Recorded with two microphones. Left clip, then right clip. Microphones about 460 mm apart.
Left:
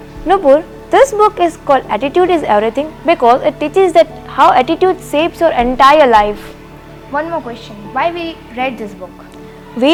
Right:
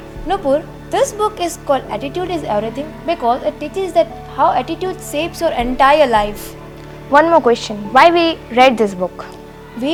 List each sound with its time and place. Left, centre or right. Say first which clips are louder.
0.3 s a woman's voice: left 7 dB; left
7.1 s a woman's voice: right 9 dB; right